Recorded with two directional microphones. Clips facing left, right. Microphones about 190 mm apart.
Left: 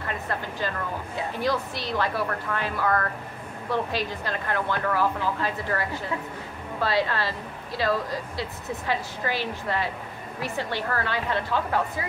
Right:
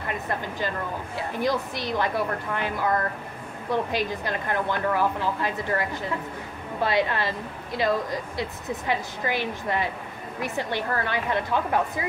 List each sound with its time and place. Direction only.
1.4 s a woman's voice: 15° right (ahead or behind)